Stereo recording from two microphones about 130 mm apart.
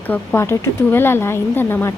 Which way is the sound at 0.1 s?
15° left (ahead or behind).